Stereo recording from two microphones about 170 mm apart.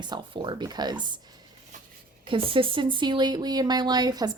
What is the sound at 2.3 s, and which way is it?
Speech, 30° right (ahead or behind).